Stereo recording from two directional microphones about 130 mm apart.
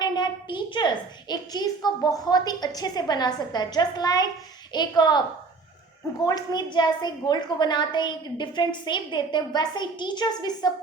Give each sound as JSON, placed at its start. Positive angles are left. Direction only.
{"t": 0.0, "sound": "a woman's voice", "side_deg": 35}
{"t": 6.2, "sound": "a woman's voice", "side_deg": 30}